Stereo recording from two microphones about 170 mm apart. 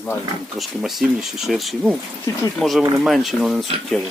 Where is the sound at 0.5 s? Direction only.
Centre (ahead or behind).